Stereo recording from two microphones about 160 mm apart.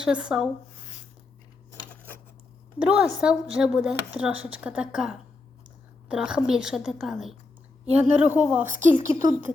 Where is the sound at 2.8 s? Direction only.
5° right (ahead or behind).